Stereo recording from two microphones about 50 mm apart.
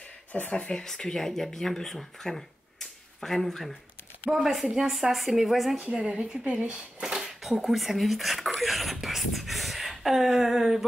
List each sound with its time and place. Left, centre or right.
0.3 s speech: left
0.8 s speech: centre
5.8 s speech: centre
7.6 s speech: centre
8.5 s a sound: centre